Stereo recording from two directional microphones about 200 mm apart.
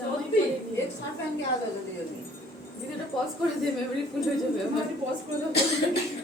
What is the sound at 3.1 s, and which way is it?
Speech, centre (ahead or behind).